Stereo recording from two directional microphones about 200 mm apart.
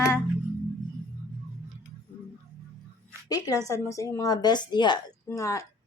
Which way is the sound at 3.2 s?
20° left (ahead or behind).